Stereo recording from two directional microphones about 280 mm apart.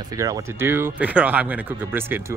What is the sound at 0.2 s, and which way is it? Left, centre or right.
Speech, centre.